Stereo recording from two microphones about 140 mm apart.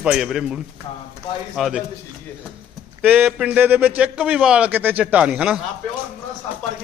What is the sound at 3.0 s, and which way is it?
A man's voice, 10° right (ahead or behind).